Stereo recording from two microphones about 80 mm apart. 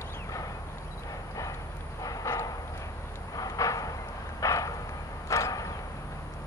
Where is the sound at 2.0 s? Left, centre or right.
Left.